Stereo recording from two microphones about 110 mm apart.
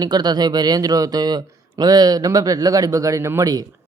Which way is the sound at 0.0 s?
40° right (ahead or behind).